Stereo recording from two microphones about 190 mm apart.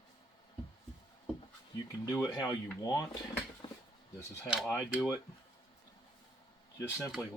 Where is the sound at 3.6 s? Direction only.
25° left (ahead or behind).